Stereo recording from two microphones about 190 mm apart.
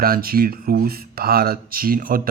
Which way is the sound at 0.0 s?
50° right (ahead or behind).